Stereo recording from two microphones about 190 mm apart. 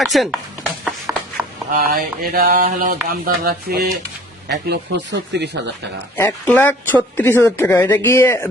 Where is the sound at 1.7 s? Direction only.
50° right (ahead or behind).